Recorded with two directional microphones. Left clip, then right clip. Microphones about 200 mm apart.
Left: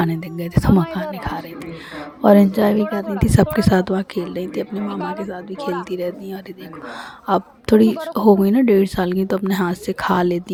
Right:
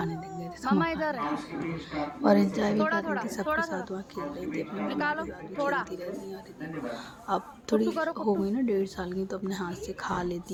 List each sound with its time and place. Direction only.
0.0 s a woman's voice: 50° left (ahead or behind)
2.2 s a woman's voice: 45° left (ahead or behind)
4.9 s a woman's voice: 10° right (ahead or behind)
5.3 s a woman's voice: 45° left (ahead or behind)